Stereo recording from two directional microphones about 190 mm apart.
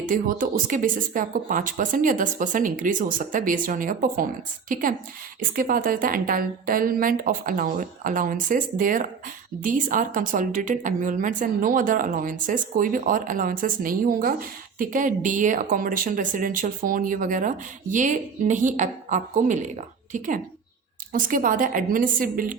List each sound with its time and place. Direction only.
0.0 s a woman's voice: 45° right (ahead or behind)